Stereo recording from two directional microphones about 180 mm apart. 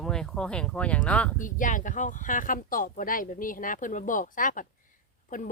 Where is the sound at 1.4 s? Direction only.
45° left (ahead or behind).